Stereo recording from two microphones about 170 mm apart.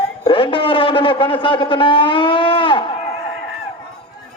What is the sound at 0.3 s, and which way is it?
Speech, 30° left (ahead or behind).